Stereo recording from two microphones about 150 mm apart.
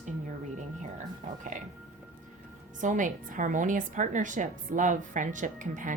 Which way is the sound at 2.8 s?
60° right (ahead or behind).